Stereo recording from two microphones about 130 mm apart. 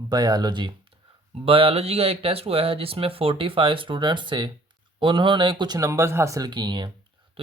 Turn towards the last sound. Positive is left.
turn(degrees=-45)  # may be behind; listen again after turning